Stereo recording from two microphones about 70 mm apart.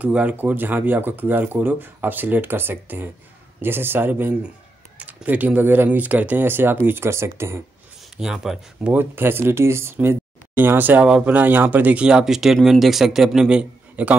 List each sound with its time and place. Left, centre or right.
0.0 s speech: centre; by 7.6 s right
8.2 s a man's voice: centre
8.8 s a man's voice: right